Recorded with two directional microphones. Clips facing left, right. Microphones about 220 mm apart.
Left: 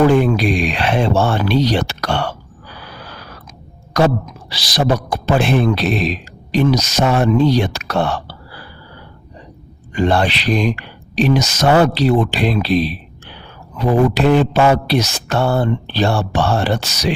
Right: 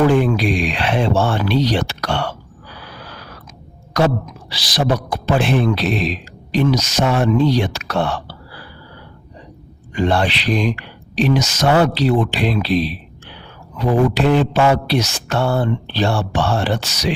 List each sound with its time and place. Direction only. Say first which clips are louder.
0.2 s a man's voice: left 2 dB; 40° left (ahead or behind)
4.5 s a man's voice: left 2 dB; 40° left (ahead or behind)
9.9 s a man's voice: left 2 dB; 45° left (ahead or behind)